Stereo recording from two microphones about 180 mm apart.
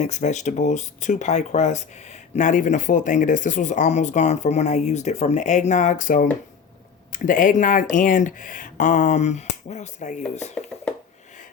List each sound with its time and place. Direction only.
0.0 s speech: 40° left (ahead or behind)